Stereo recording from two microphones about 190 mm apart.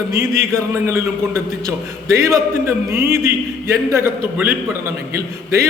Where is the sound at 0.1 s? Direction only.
15° right (ahead or behind).